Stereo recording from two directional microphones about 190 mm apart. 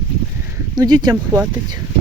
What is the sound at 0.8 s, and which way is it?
Speech, 20° right (ahead or behind).